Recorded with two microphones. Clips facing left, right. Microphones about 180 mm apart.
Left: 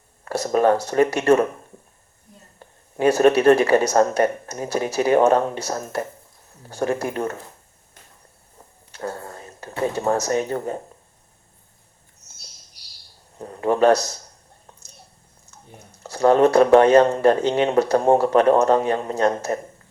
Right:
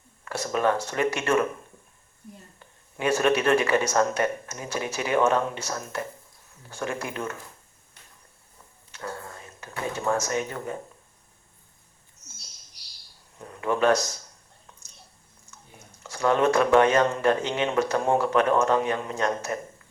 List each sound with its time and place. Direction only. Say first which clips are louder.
0.3 s speech: left 7 dB; 40° left (ahead or behind)
2.6 s speech: left 10 dB; 40° left (ahead or behind)
8.5 s a sound: left 7 dB; 40° left (ahead or behind)
13.4 s speech: left 6 dB; 35° left (ahead or behind)
15.4 s speech: left 5 dB; 40° left (ahead or behind)